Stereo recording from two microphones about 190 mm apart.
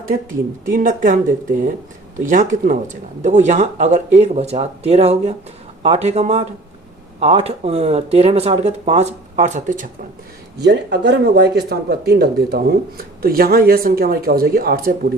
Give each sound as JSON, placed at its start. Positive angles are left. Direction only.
{"t": 0.7, "sound": "speech", "side_deg": -45}
{"t": 2.2, "sound": "speech", "side_deg": -45}
{"t": 10.6, "sound": "speech", "side_deg": -60}